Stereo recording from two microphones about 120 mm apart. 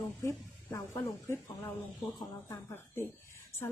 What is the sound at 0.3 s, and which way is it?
Speech, 25° left (ahead or behind).